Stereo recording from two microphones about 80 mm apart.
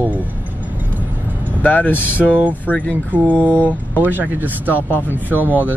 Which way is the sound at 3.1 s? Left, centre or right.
Centre.